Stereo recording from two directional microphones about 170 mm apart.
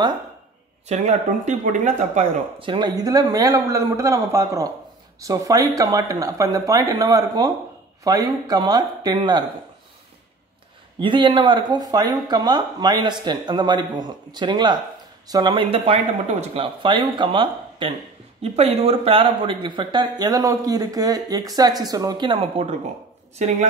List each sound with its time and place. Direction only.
0.8 s speech: 40° right (ahead or behind)
2.6 s speech: 25° right (ahead or behind)
11.0 s speech: 30° right (ahead or behind)
23.3 s speech: 45° right (ahead or behind)